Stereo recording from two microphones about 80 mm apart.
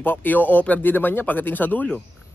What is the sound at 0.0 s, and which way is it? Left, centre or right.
Speech, left.